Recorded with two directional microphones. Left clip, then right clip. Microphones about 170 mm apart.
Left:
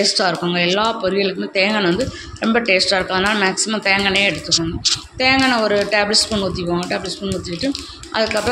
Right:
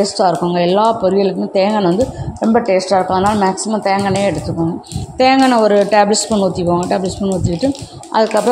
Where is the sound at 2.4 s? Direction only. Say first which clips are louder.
Right 3 dB; 20° right (ahead or behind).